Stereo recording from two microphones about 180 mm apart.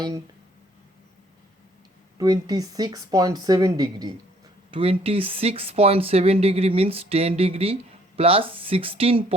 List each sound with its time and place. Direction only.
2.1 s speech: 20° right (ahead or behind)
4.7 s speech: 30° right (ahead or behind)